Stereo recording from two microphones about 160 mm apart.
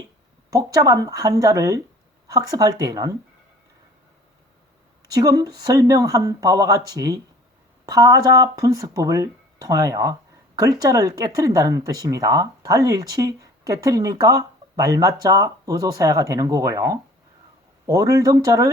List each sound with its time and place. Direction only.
0.5 s speech: 20° right (ahead or behind)
5.1 s speech: 20° right (ahead or behind)